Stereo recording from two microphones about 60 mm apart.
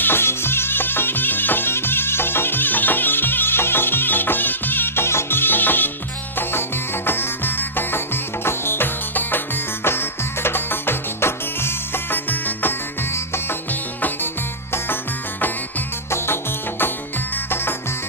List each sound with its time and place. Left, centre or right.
0.0 s music: left
12.1 s music: left
13.1 s music: left
16.0 s music: left